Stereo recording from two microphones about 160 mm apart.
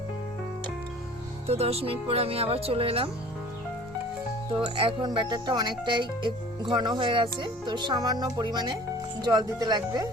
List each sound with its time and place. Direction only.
1.5 s speech: 40° right (ahead or behind)
4.5 s speech: 35° right (ahead or behind)